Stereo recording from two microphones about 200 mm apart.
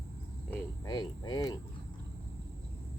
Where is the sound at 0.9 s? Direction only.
20° left (ahead or behind).